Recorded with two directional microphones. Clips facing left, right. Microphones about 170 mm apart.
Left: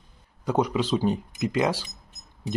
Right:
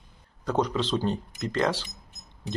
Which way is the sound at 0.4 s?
10° left (ahead or behind).